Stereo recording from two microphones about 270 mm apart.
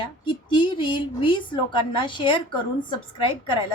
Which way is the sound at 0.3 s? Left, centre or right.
Centre.